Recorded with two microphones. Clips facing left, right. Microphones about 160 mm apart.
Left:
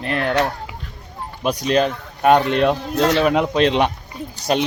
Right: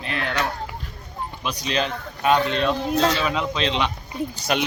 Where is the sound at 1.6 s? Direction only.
50° left (ahead or behind).